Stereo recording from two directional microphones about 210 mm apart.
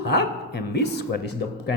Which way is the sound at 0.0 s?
50° left (ahead or behind).